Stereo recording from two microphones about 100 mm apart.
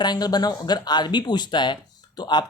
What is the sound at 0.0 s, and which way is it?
Speech, 45° left (ahead or behind).